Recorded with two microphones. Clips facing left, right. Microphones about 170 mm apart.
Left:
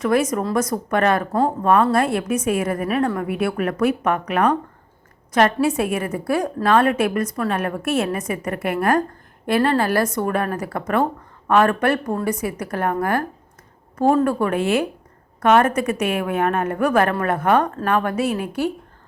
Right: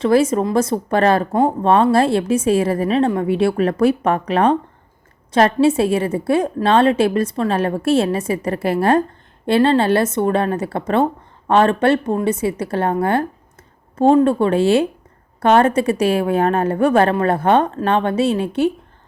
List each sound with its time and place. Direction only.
0.0 s a woman's voice: 30° right (ahead or behind)